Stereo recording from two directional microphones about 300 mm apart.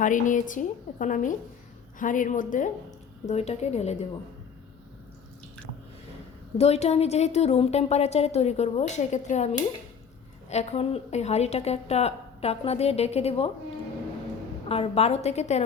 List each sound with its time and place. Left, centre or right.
0.0 s a woman's voice: left
6.6 s a woman's voice: left
14.7 s a woman's voice: centre